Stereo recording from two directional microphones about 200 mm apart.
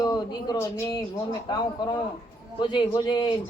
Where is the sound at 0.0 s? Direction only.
20° left (ahead or behind).